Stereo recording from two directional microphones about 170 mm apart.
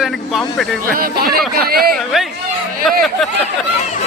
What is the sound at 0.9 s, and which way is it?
Speech, 60° right (ahead or behind).